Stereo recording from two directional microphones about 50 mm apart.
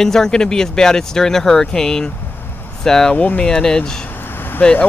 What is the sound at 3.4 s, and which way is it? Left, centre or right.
Speech, centre.